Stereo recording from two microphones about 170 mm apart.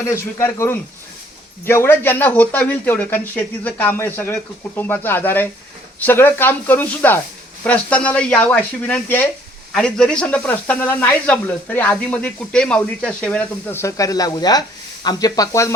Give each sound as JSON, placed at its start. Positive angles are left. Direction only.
{"t": 0.1, "sound": "speech", "side_deg": 15}